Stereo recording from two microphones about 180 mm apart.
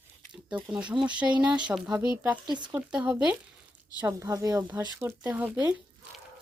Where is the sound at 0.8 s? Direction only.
5° right (ahead or behind).